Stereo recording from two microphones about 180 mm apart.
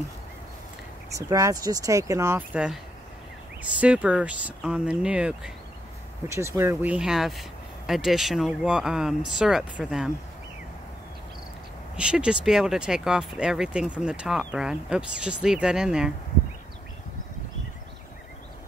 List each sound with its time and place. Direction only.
1.1 s speech: 20° right (ahead or behind)
3.8 s speech: 5° right (ahead or behind)
12.0 s speech: 5° right (ahead or behind)